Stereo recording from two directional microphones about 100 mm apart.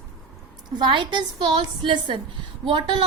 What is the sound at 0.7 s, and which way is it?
A woman's voice, 50° right (ahead or behind).